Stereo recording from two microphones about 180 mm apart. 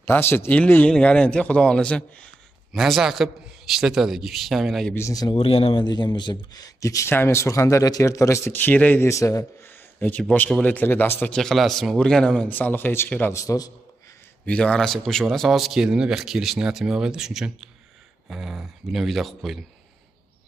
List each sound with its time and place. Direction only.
0.0 s a man's voice: 10° left (ahead or behind)
4.9 s a man's voice: 20° left (ahead or behind)
14.4 s speech: 5° left (ahead or behind)